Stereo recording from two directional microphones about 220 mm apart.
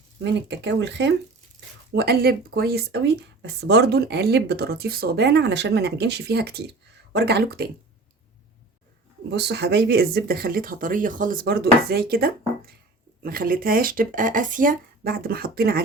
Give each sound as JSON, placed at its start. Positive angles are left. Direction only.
{"t": 0.2, "sound": "speech", "side_deg": -55}
{"t": 9.3, "sound": "speech", "side_deg": -50}